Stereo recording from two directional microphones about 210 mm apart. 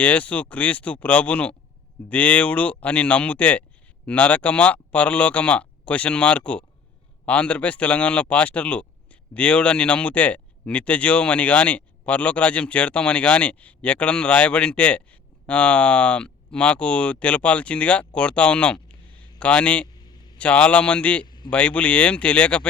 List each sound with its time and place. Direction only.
0.0 s speech: 5° left (ahead or behind)
21.2 s a sound: 20° left (ahead or behind)
21.5 s speech: 5° left (ahead or behind)